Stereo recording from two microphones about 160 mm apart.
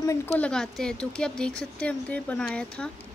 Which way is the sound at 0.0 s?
20° left (ahead or behind).